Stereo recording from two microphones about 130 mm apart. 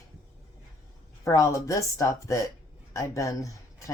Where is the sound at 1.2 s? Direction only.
25° left (ahead or behind).